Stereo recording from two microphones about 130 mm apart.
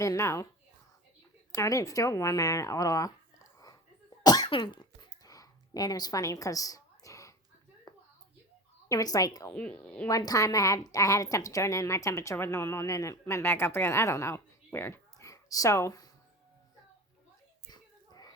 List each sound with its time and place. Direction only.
0.0 s a woman's voice: 20° left (ahead or behind)
1.5 s a woman's voice: 25° left (ahead or behind)
4.2 s cough: 30° left (ahead or behind)
4.4 s a sound: 40° left (ahead or behind)
8.9 s a woman's voice: 30° left (ahead or behind)
9.5 s speech: 10° left (ahead or behind)
10.1 s a woman's voice: 30° left (ahead or behind)
17.7 s a sound: 30° left (ahead or behind)